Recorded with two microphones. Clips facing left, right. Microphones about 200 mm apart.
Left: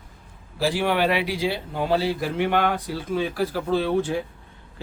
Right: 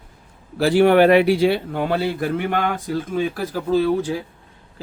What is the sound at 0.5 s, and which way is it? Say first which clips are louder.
Speech: right 9 dB; 60° right (ahead or behind).